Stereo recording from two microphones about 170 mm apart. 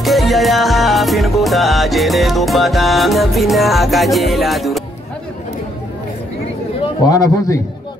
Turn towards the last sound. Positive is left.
turn(degrees=20)  # may be behind; listen again after turning